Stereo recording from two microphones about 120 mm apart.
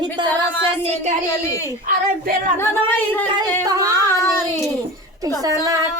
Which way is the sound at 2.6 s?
15° left (ahead or behind).